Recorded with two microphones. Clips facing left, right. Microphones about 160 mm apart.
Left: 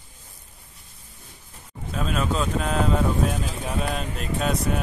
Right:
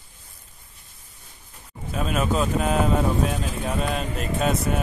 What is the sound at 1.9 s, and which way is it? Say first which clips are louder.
Speech: right 2 dB; 5° right (ahead or behind).